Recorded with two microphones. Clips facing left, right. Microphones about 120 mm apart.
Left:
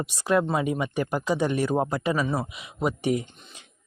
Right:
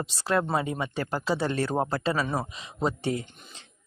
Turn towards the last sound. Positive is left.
turn(degrees=15)  # may be behind; listen again after turning